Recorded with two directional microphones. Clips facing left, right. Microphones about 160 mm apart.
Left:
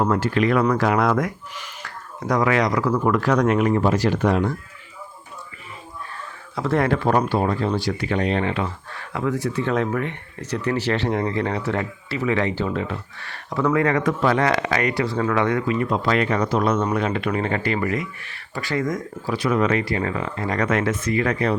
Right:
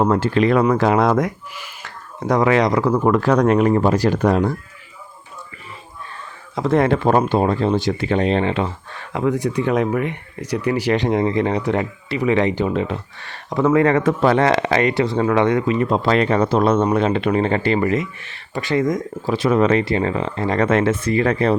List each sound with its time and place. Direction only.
0.0 s speech: 30° right (ahead or behind)
6.6 s speech: 20° right (ahead or behind)